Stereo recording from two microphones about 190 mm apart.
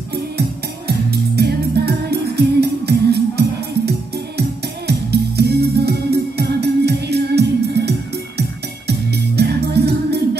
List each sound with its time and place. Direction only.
0.1 s music: 55° right (ahead or behind)